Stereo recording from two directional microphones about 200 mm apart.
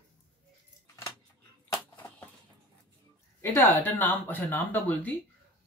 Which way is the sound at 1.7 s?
15° left (ahead or behind).